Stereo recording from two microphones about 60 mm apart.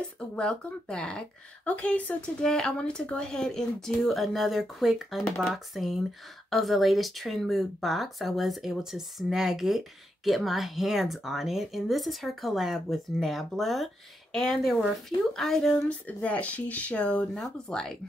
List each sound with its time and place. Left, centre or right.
0.4 s speech: centre
15.9 s speech: left
17.3 s speech: centre